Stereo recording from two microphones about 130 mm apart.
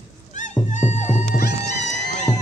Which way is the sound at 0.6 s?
65° left (ahead or behind).